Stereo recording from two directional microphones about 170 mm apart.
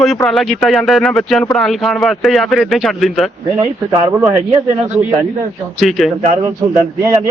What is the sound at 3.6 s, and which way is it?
Speech, 20° right (ahead or behind).